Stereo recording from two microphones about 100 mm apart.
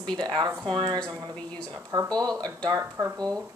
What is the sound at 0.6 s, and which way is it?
Speech, 55° right (ahead or behind).